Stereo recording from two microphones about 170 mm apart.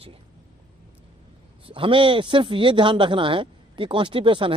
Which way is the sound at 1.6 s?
30° right (ahead or behind).